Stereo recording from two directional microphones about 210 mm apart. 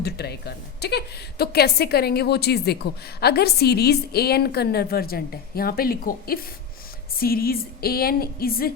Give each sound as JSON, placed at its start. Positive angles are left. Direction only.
{"t": 0.0, "sound": "a woman's voice", "side_deg": 50}